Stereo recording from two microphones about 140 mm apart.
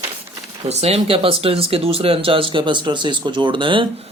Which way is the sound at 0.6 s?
50° right (ahead or behind).